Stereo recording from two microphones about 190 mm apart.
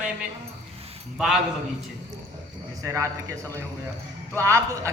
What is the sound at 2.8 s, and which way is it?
Speech, 15° right (ahead or behind).